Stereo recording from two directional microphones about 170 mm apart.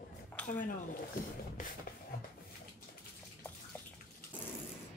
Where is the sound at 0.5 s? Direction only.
50° left (ahead or behind).